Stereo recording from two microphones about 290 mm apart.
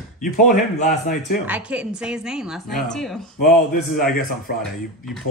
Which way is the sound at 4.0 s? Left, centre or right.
Left.